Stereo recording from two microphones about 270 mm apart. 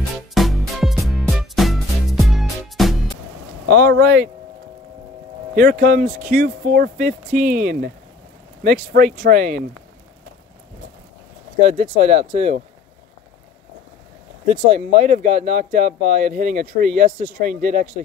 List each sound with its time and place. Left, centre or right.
0.3 s music: centre
3.6 s speech: right
5.5 s speech: right
11.6 s speech: right
14.4 s speech: right